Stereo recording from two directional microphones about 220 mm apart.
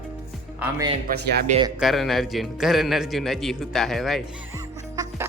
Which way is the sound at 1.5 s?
20° right (ahead or behind).